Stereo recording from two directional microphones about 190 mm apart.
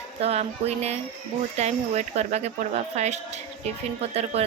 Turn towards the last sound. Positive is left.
turn(degrees=-30)  # may be behind; listen again after turning